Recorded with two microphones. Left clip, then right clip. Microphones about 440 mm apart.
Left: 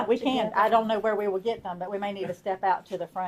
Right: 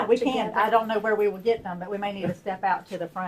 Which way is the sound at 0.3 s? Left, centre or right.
Left.